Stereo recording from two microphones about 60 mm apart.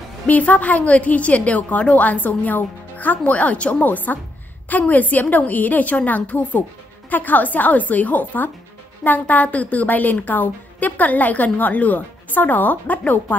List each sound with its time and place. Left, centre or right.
0.3 s a woman's voice: left